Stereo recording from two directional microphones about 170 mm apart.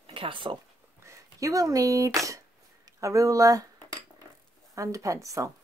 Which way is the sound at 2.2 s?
20° right (ahead or behind).